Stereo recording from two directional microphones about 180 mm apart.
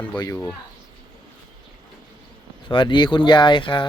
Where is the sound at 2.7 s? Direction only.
25° left (ahead or behind).